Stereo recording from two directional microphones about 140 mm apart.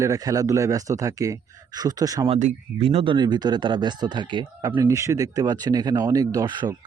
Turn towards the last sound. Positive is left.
turn(degrees=-30)  # may be behind; listen again after turning